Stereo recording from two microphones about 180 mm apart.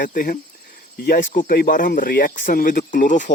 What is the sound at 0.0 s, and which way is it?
Speech, 50° left (ahead or behind).